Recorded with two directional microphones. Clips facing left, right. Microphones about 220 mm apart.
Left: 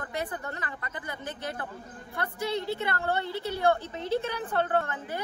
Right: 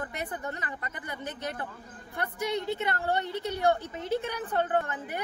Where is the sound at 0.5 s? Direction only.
15° right (ahead or behind).